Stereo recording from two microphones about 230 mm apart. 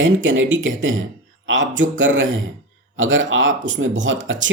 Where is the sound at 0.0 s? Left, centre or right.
Right.